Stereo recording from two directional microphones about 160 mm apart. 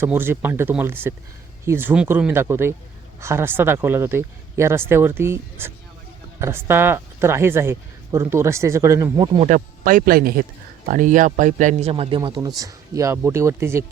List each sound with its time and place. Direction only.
0.0 s speech: 15° right (ahead or behind)
9.2 s speech: 30° right (ahead or behind)
9.5 s speech: 55° right (ahead or behind); by 13.8 s 15° right (ahead or behind)